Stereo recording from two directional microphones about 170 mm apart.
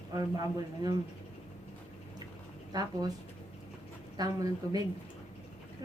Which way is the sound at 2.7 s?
25° right (ahead or behind).